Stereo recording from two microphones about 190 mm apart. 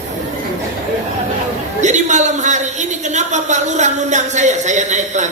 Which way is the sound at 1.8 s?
40° right (ahead or behind).